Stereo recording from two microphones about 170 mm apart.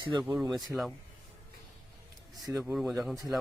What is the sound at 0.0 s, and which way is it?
Speech, 30° right (ahead or behind).